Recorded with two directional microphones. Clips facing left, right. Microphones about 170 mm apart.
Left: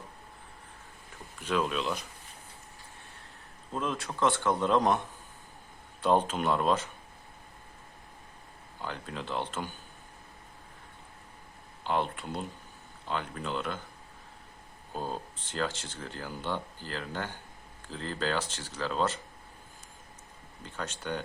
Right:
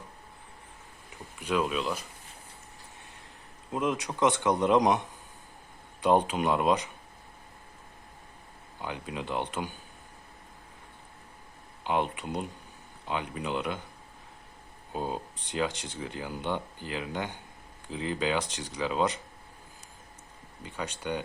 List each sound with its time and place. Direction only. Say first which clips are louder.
1.4 s speech: right 1 dB; 10° right (ahead or behind)
3.7 s speech: right 4 dB; 15° right (ahead or behind)
8.8 s speech: right 2 dB; 10° right (ahead or behind)
11.8 s speech: right 2 dB; 10° right (ahead or behind)
14.9 s speech: right 3 dB; 10° right (ahead or behind)
20.7 s speech: right 2 dB; 10° right (ahead or behind)